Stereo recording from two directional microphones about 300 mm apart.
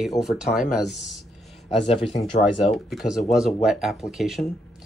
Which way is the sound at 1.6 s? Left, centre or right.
Centre.